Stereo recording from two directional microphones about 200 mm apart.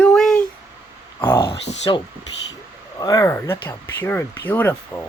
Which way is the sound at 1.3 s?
15° left (ahead or behind).